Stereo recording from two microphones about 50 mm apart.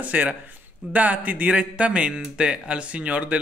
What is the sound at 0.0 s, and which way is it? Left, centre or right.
Speech, right.